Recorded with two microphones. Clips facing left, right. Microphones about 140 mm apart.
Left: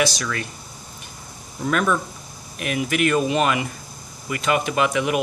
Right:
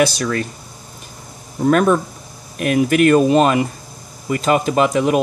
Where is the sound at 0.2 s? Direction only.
40° right (ahead or behind).